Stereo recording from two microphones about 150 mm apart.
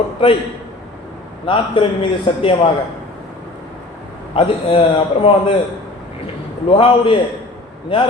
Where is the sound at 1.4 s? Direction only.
35° left (ahead or behind).